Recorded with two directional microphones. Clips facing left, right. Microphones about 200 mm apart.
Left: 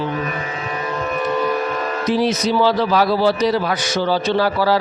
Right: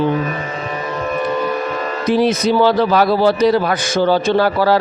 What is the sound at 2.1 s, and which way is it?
A man's voice, 55° right (ahead or behind).